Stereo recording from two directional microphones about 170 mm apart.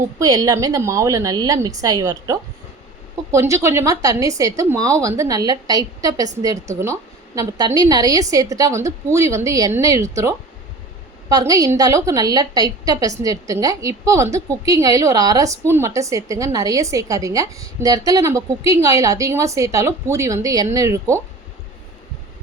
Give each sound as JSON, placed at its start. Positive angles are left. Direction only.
{"t": 0.2, "sound": "a woman's voice", "side_deg": -25}